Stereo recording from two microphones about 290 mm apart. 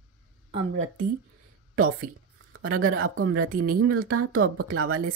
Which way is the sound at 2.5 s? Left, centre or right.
Right.